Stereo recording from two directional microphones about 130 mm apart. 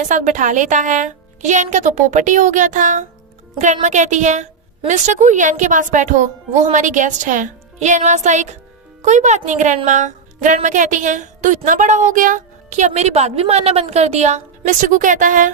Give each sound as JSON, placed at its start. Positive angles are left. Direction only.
{"t": 0.0, "sound": "a woman's voice", "side_deg": -75}